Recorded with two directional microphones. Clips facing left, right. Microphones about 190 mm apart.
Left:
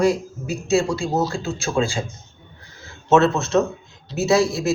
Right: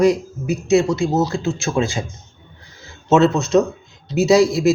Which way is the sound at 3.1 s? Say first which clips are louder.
Right 2 dB; 20° right (ahead or behind).